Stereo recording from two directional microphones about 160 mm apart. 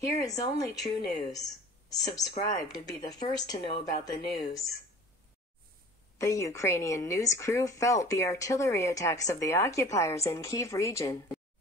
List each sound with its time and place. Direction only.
0.1 s a woman's voice: 20° left (ahead or behind)
6.1 s a woman's voice: 20° left (ahead or behind)